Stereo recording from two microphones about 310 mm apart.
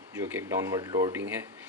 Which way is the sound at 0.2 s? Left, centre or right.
Centre.